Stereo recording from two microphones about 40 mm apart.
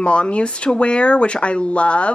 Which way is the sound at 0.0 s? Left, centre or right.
Left.